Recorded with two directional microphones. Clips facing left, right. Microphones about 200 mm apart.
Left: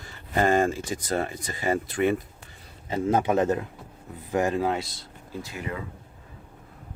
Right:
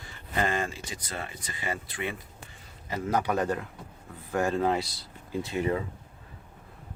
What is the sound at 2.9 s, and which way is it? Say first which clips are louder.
Speech: left 5 dB; 25° left (ahead or behind).